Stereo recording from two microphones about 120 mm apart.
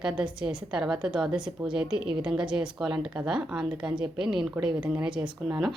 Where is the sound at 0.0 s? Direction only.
5° right (ahead or behind).